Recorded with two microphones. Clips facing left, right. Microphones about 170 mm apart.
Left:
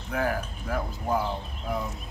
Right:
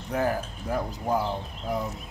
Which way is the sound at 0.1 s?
35° right (ahead or behind).